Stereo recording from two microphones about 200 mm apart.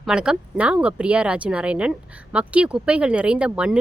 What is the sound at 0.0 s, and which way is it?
Speech, 5° right (ahead or behind).